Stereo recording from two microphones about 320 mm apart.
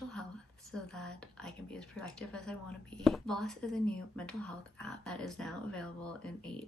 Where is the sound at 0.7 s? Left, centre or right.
Centre.